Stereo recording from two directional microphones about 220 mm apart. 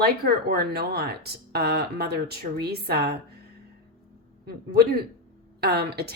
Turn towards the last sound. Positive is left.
turn(degrees=-45)  # may be behind; listen again after turning